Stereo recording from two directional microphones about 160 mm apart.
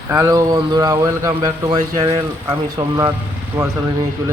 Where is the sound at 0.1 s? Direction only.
15° right (ahead or behind).